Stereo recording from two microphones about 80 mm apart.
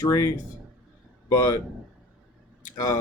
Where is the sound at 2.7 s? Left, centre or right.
Left.